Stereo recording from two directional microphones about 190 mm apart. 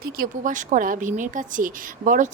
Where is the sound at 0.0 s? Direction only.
45° right (ahead or behind).